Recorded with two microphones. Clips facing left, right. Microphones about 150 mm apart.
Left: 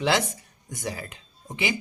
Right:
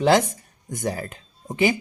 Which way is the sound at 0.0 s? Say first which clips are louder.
Right 6 dB; 40° right (ahead or behind).